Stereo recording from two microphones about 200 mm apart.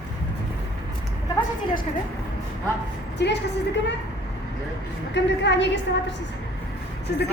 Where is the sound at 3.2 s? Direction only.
55° left (ahead or behind).